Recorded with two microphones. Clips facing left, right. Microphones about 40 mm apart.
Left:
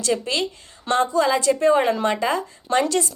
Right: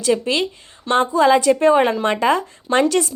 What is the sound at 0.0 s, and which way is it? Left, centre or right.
A woman's voice, right.